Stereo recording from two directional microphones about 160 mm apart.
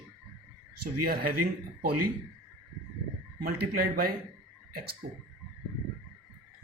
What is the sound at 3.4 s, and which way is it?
Speech, 65° right (ahead or behind).